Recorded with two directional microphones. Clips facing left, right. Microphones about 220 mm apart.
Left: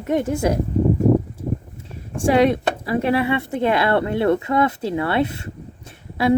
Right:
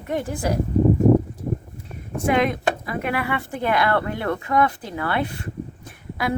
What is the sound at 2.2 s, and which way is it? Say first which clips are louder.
Speech: left 5 dB; 30° left (ahead or behind).